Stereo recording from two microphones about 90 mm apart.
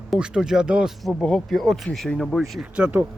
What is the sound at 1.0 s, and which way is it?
A man's voice, 5° left (ahead or behind).